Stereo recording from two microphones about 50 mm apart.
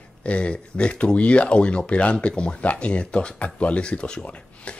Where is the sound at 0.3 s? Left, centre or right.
Left.